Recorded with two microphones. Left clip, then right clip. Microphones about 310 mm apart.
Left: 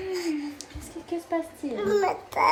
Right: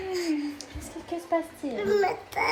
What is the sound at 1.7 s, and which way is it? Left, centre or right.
Speech, centre.